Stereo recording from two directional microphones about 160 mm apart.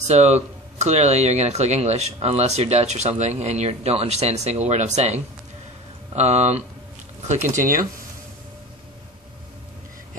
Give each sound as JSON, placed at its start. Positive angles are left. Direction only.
{"t": 0.0, "sound": "speech", "side_deg": -45}
{"t": 7.2, "sound": "speech", "side_deg": -55}